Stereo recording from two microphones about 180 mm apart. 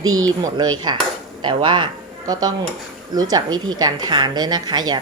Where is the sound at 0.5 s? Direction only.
25° right (ahead or behind).